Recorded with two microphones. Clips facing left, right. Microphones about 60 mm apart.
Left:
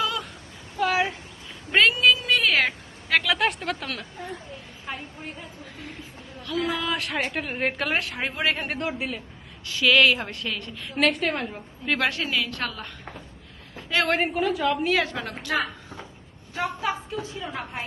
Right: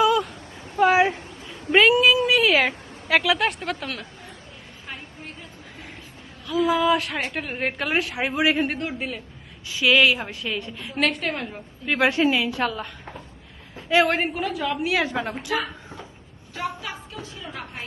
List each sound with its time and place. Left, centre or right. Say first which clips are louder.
0.0 s a sound: right 8 dB; centre
0.8 s a sound: right 6 dB; right
1.7 s cat: right 3 dB; centre
6.5 s a woman's voice: right 7 dB; centre
12.5 s a woman's voice: right 6 dB; centre
15.0 s a woman's voice: right 5 dB; centre
16.6 s a woman's voice: left 3 dB; left